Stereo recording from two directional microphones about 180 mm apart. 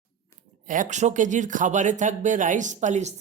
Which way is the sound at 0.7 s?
45° right (ahead or behind).